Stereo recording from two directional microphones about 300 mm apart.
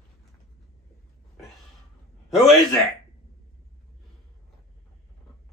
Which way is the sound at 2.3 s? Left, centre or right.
Centre.